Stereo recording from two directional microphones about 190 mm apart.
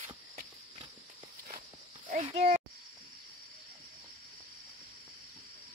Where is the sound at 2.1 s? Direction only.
35° right (ahead or behind).